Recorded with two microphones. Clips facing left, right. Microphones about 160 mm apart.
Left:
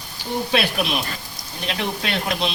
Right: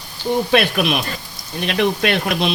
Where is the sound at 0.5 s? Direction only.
60° right (ahead or behind).